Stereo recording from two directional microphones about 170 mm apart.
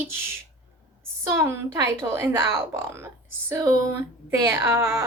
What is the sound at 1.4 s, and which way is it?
A woman's voice, 15° right (ahead or behind).